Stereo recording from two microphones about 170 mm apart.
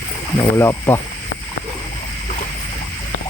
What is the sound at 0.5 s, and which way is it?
Speech, 15° left (ahead or behind).